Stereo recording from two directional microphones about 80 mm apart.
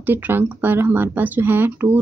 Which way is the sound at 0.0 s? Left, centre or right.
Right.